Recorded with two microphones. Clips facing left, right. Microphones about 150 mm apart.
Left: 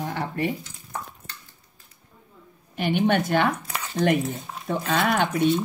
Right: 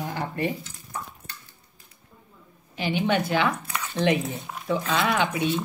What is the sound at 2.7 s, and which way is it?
Speech, 50° left (ahead or behind).